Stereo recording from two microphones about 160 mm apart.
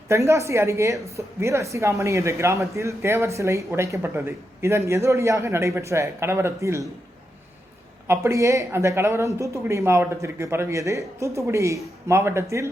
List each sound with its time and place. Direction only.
0.1 s a man's voice: 20° right (ahead or behind)
8.0 s a man's voice: 15° right (ahead or behind)